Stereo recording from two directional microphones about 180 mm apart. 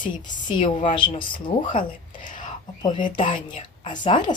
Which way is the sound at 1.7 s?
45° left (ahead or behind).